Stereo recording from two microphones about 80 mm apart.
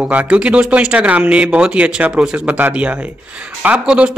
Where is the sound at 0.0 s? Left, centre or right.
Centre.